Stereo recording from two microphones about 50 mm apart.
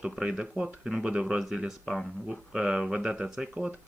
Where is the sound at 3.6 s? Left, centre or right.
Right.